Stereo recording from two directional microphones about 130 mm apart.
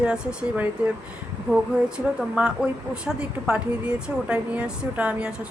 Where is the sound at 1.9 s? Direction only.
5° right (ahead or behind).